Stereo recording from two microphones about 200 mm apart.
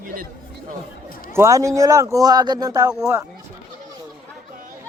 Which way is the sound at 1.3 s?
15° right (ahead or behind).